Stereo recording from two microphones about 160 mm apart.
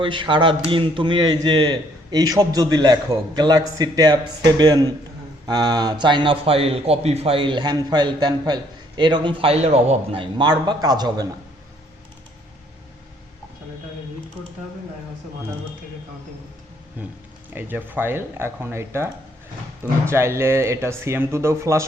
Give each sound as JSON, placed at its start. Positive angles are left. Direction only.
{"t": 0.0, "sound": "a man's voice", "side_deg": -30}
{"t": 17.5, "sound": "speech", "side_deg": -10}